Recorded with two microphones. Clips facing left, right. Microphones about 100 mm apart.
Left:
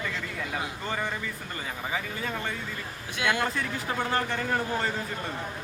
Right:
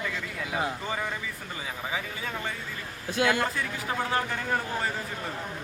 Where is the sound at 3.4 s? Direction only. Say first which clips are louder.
Left 1 dB; 5° right (ahead or behind).